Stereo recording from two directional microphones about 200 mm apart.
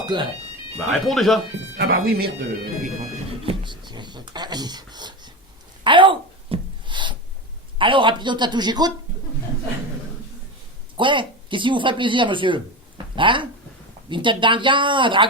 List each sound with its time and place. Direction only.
0.0 s speech: 20° right (ahead or behind)
1.0 s speech: centre (ahead or behind)
1.8 s speech: 50° right (ahead or behind)
3.4 s a sound: 25° right (ahead or behind)
7.8 s speech: 25° right (ahead or behind)
10.9 s speech: 25° right (ahead or behind)